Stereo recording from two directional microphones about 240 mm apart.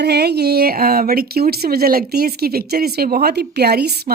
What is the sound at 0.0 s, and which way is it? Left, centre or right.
Speech, right.